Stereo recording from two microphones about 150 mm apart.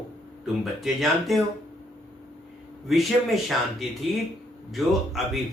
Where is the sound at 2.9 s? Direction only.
Centre (ahead or behind).